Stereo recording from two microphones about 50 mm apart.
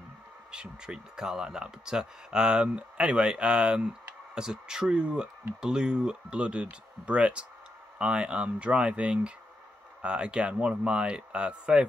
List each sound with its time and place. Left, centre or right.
0.5 s speech: centre